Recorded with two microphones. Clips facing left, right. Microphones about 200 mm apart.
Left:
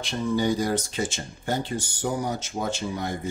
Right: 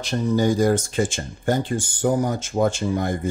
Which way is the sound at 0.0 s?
40° right (ahead or behind).